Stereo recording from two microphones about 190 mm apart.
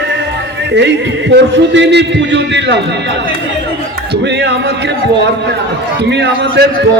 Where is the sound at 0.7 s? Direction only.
65° right (ahead or behind).